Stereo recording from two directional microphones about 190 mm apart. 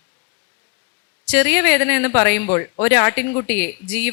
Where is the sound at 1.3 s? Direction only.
10° left (ahead or behind).